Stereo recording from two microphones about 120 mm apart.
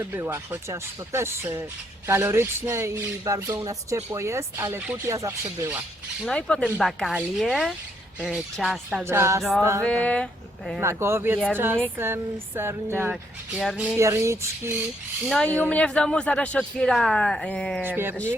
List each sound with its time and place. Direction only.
0.0 s speech: 20° right (ahead or behind)
6.2 s speech: 10° left (ahead or behind)
9.0 s speech: 20° right (ahead or behind)
9.4 s speech: centre (ahead or behind)
10.8 s speech: 20° right (ahead or behind)
13.6 s speech: 5° right (ahead or behind)
14.0 s speech: 25° right (ahead or behind)
15.3 s speech: 10° left (ahead or behind)
17.8 s speech: 15° right (ahead or behind)